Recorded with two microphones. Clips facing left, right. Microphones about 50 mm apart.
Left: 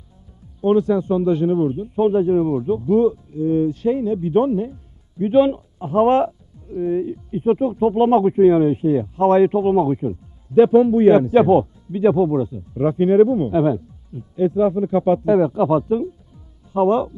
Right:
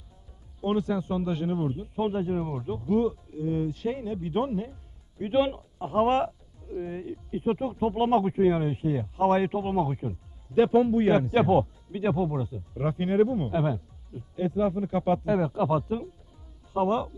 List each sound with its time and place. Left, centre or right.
0.6 s a man's voice: left
5.9 s speech: left
6.8 s a man's voice: centre